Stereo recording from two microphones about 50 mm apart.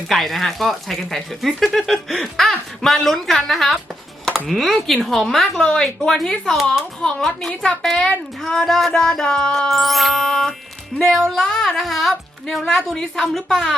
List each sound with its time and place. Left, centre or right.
0.1 s speech: centre
5.4 s a woman's voice: centre
5.8 s a woman's voice: centre